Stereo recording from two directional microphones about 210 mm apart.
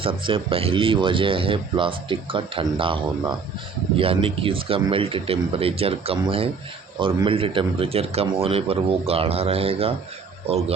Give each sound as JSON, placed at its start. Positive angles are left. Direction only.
{"t": 0.0, "sound": "speech", "side_deg": -25}